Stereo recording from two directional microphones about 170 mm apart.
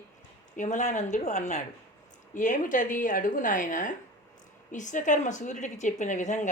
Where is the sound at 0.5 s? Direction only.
45° left (ahead or behind).